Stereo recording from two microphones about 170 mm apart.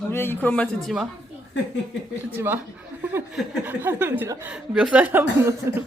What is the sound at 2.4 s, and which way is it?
Speech, 10° right (ahead or behind).